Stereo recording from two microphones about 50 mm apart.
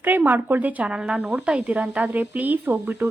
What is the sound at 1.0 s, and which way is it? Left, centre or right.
Speech, centre.